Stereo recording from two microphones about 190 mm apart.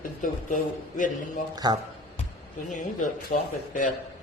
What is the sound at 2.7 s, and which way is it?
Speech, 45° left (ahead or behind).